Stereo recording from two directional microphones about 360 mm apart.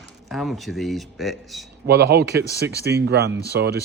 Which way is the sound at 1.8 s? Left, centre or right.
Right.